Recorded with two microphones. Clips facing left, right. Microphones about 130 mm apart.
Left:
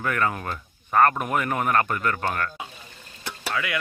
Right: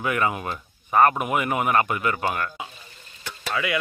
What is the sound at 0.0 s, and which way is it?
Speech, 10° right (ahead or behind).